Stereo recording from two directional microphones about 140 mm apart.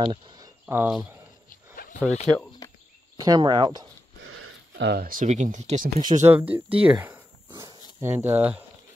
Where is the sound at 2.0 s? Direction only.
55° left (ahead or behind).